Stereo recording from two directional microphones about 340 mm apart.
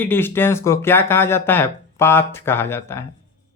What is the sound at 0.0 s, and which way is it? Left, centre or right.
Speech, centre.